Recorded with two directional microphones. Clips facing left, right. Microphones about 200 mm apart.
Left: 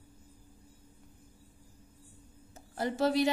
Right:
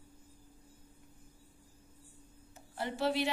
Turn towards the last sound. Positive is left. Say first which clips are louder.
# left 5 dB
turn(degrees=40)  # may be behind; listen again after turning